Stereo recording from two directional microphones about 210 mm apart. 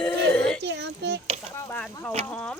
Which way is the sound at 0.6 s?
55° right (ahead or behind).